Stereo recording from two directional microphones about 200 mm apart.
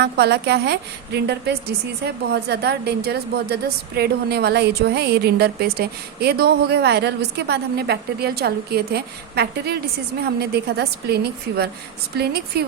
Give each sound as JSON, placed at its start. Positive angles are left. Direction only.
{"t": 0.0, "sound": "a woman's voice", "side_deg": -55}